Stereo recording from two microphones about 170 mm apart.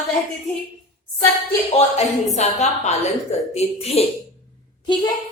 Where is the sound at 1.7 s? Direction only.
40° left (ahead or behind).